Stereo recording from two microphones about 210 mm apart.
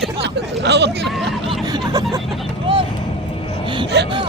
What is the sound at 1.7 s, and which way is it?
Hubbub, 20° right (ahead or behind).